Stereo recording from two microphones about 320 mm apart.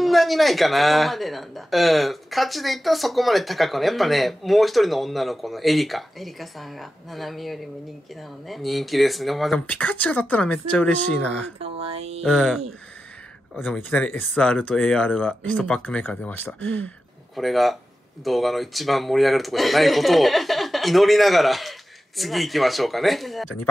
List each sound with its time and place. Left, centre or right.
0.0 s speech: centre
11.6 s mantra: centre
12.2 s speech: centre